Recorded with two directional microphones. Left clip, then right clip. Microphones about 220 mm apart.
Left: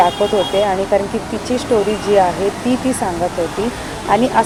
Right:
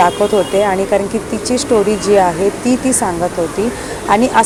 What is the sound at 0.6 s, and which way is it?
Speech, 20° right (ahead or behind).